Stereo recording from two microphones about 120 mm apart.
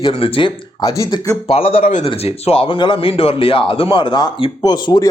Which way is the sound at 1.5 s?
55° left (ahead or behind).